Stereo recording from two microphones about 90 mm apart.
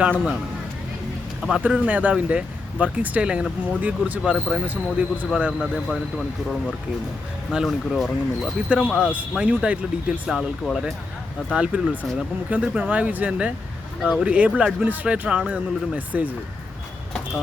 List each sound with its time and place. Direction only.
1.4 s speech: centre (ahead or behind)
1.6 s speech: 15° right (ahead or behind)
4.4 s speech: centre (ahead or behind)
4.6 s speech: 15° right (ahead or behind)
7.5 s speech: 5° right (ahead or behind)
11.5 s speech: 10° right (ahead or behind)